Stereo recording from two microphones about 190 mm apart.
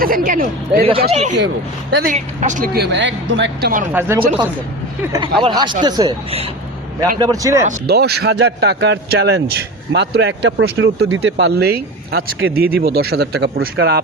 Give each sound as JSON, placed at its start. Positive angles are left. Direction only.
{"t": 0.0, "sound": "speech", "side_deg": -50}
{"t": 1.0, "sound": "speech", "side_deg": -35}
{"t": 1.9, "sound": "speech", "side_deg": -55}
{"t": 2.1, "sound": "speech", "side_deg": -40}
{"t": 2.7, "sound": "speech", "side_deg": -60}
{"t": 4.0, "sound": "a man's voice", "side_deg": -10}
{"t": 5.1, "sound": "a man's voice", "side_deg": -25}
{"t": 7.9, "sound": "speech", "side_deg": -60}